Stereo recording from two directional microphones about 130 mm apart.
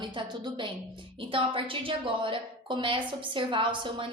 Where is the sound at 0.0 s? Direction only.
35° right (ahead or behind).